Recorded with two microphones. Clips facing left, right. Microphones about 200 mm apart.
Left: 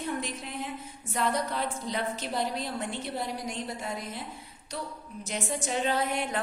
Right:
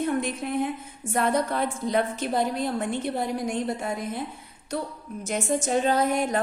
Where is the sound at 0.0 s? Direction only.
55° right (ahead or behind).